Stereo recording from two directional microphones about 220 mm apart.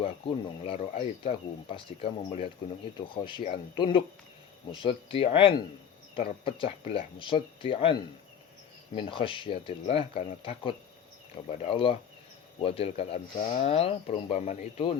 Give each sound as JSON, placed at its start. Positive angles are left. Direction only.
{"t": 0.0, "sound": "speech", "side_deg": 25}